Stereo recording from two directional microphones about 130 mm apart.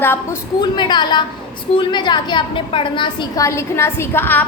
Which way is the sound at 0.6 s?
35° left (ahead or behind).